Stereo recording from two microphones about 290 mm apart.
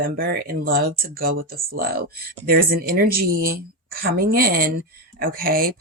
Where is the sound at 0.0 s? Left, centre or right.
Right.